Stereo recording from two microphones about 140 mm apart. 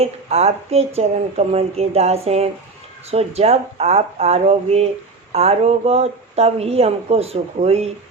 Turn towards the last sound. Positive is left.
turn(degrees=-50)  # may be behind; listen again after turning